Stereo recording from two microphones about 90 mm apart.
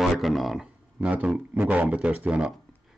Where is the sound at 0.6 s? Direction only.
15° right (ahead or behind).